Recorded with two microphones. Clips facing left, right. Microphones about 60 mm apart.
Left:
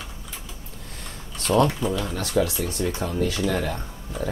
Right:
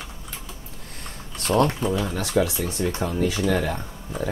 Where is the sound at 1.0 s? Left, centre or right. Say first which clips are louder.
Right 1 dB; centre.